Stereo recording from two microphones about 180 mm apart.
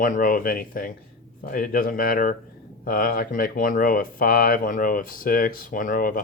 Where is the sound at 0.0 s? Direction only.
50° left (ahead or behind).